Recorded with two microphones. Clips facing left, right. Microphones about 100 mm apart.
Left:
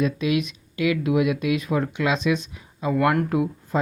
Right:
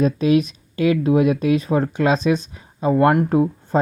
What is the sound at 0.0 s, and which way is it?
Speech, 35° right (ahead or behind).